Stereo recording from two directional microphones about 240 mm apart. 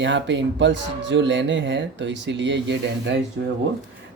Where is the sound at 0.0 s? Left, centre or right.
Right.